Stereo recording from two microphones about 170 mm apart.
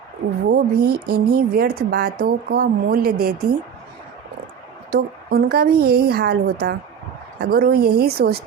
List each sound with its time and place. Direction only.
0.5 s speech: 65° right (ahead or behind)
4.9 s speech: 65° right (ahead or behind)